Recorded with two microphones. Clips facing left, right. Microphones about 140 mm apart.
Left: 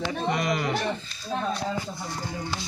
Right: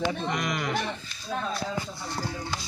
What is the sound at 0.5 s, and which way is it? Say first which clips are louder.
Speech: left 3 dB; 30° left (ahead or behind).